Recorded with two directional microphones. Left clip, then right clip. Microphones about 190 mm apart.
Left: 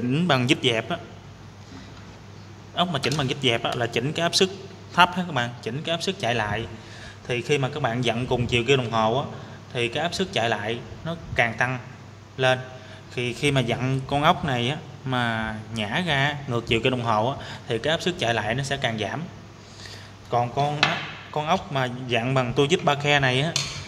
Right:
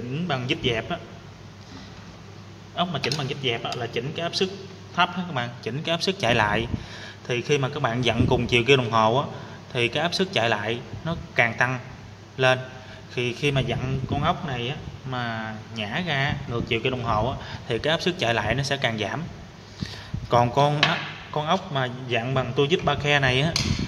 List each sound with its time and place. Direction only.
0.1 s a man's voice: 30° left (ahead or behind)
2.7 s a man's voice: 20° left (ahead or behind)
5.3 s a man's voice: 15° left (ahead or behind)
5.7 s a man's voice: centre (ahead or behind)
7.2 s a man's voice: centre (ahead or behind)
20.2 s speech: 25° right (ahead or behind)
21.3 s a man's voice: centre (ahead or behind)